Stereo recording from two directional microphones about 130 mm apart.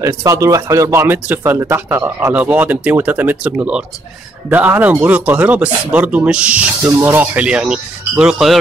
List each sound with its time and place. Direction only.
0.0 s speech: 25° right (ahead or behind); by 8.5 s 5° right (ahead or behind)